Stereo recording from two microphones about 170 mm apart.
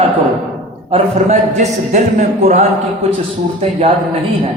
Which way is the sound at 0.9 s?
40° right (ahead or behind).